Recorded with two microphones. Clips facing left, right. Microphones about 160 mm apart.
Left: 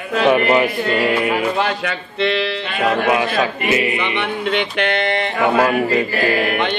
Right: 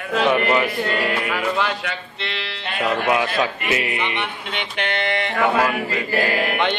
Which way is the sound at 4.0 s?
75° left (ahead or behind).